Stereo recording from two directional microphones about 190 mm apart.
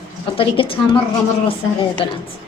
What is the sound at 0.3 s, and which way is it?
Speech, 30° left (ahead or behind).